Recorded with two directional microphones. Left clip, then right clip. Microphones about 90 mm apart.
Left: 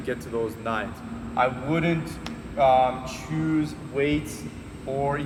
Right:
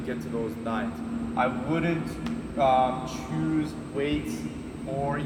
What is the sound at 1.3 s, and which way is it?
A man's voice, 35° left (ahead or behind).